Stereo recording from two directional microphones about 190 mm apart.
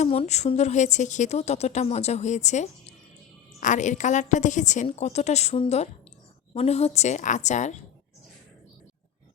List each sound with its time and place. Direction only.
0.0 s speech: 35° left (ahead or behind)